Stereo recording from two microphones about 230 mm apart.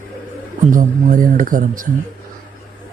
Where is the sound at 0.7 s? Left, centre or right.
Right.